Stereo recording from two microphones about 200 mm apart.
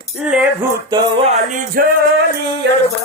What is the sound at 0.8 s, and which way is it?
Music, 25° right (ahead or behind).